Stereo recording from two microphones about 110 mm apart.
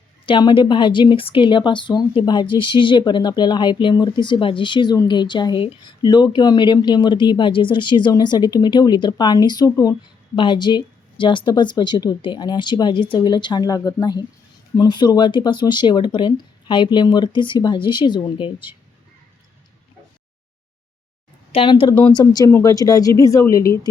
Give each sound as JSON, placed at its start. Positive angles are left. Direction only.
{"t": 0.3, "sound": "speech", "side_deg": 50}
{"t": 10.3, "sound": "speech", "side_deg": 45}
{"t": 21.5, "sound": "speech", "side_deg": 55}